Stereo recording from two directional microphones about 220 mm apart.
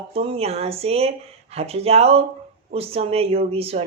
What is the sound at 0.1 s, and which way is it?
Speech, 25° right (ahead or behind).